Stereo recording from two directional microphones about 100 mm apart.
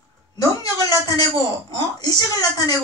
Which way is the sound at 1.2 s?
40° left (ahead or behind).